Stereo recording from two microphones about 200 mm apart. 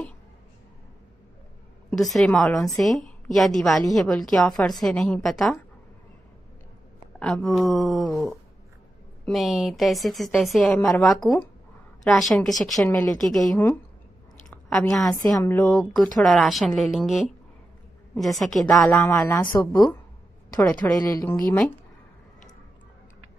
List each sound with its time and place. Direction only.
1.9 s a woman's voice: centre (ahead or behind)
7.2 s a woman's voice: 5° left (ahead or behind)
18.4 s a woman's voice: centre (ahead or behind)
19.5 s speech: 15° left (ahead or behind)
20.6 s a woman's voice: 5° left (ahead or behind)